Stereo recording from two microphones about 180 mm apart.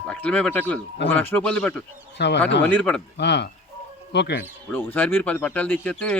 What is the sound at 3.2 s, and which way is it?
Speech, 70° left (ahead or behind).